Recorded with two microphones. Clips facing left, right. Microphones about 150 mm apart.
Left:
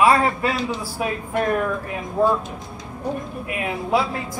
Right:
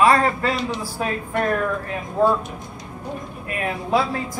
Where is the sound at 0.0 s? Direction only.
15° left (ahead or behind).